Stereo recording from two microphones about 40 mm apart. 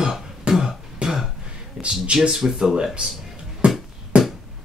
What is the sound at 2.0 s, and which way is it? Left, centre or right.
Speech, right.